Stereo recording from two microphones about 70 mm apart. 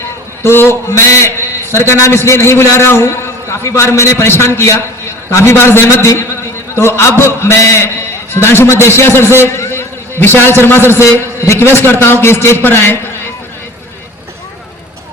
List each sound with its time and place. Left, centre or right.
0.4 s a man's voice: left
9.3 s a sound: left
10.6 s a man's voice: left